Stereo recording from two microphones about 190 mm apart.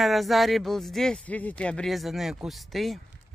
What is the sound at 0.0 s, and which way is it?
Speech, centre (ahead or behind).